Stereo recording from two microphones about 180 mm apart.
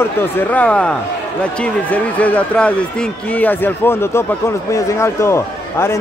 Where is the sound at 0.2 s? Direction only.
10° left (ahead or behind).